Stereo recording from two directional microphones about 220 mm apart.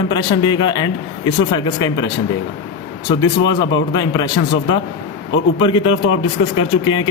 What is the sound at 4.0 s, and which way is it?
Speech, 20° left (ahead or behind).